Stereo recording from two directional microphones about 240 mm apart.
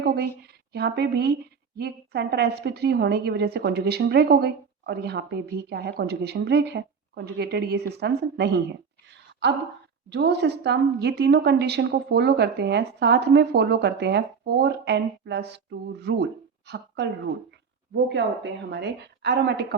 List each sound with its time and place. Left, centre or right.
0.0 s a sound: right
0.7 s a woman's voice: right
10.1 s a woman's voice: right
18.7 s a woman's voice: right